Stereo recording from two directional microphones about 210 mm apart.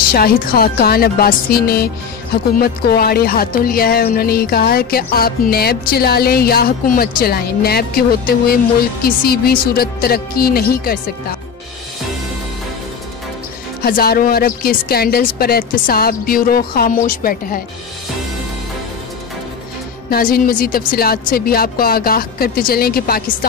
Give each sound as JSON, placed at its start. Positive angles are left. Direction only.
{"t": 0.1, "sound": "speech", "side_deg": 45}
{"t": 13.8, "sound": "speech", "side_deg": 45}
{"t": 20.1, "sound": "speech", "side_deg": 45}